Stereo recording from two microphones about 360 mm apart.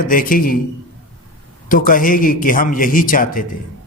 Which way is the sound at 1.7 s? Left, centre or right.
Left.